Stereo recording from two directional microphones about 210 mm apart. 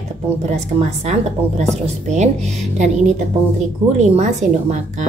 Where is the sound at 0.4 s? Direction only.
30° right (ahead or behind).